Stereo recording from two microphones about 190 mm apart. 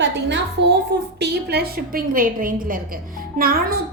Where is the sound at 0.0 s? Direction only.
65° right (ahead or behind).